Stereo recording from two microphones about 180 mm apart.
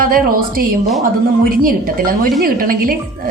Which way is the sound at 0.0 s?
50° right (ahead or behind).